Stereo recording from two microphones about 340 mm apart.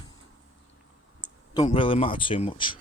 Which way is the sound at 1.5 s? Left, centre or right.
Centre.